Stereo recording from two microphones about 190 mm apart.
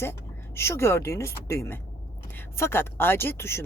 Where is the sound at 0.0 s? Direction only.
15° left (ahead or behind).